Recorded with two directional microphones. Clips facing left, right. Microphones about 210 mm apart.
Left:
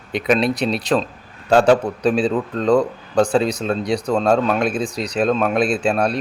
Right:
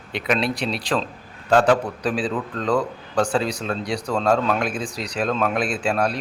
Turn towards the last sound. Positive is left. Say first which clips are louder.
# left 4 dB
turn(degrees=25)  # may be behind; listen again after turning